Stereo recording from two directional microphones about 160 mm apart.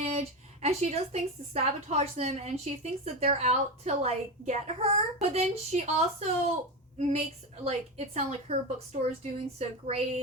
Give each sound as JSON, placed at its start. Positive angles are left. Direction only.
{"t": 0.0, "sound": "a woman's voice", "side_deg": -40}